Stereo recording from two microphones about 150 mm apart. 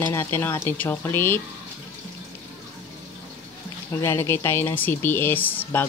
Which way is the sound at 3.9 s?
15° left (ahead or behind).